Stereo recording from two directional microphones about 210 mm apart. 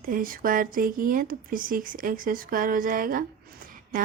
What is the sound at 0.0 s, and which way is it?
Speech, 40° right (ahead or behind).